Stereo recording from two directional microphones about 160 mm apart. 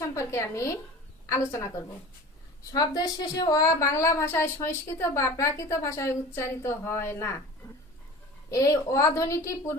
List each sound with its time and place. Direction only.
0.0 s a woman's voice: 20° left (ahead or behind)
8.4 s a woman's voice: 20° left (ahead or behind)